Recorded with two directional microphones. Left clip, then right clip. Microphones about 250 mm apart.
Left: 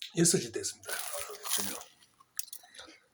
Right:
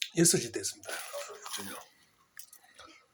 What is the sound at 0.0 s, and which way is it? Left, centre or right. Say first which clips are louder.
Speech: right 1 dB; centre.